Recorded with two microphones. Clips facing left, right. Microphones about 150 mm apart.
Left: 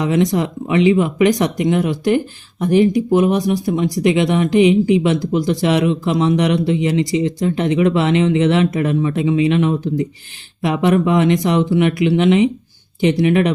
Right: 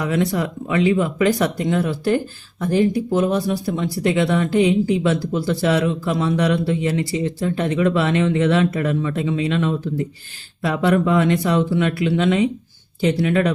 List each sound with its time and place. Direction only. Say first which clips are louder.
0.0 s a man's voice: left 4 dB; 20° left (ahead or behind)